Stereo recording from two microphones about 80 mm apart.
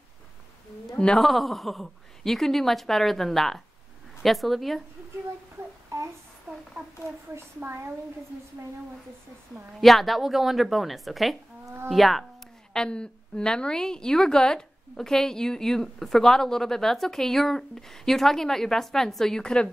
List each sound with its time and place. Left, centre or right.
0.9 s speech: centre
1.2 s a woman's voice: centre
5.9 s child singing: right
6.5 s a sound: centre
7.3 s a woman's voice: right
9.8 s a woman's voice: centre
11.6 s a woman's voice: right
11.9 s a woman's voice: centre
12.7 s a woman's voice: centre